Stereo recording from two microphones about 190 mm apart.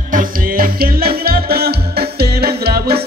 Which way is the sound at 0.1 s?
45° right (ahead or behind).